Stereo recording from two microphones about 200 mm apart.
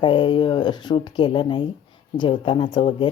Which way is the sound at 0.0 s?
25° left (ahead or behind).